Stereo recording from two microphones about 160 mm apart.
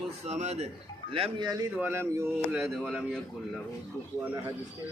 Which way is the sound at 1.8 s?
15° right (ahead or behind).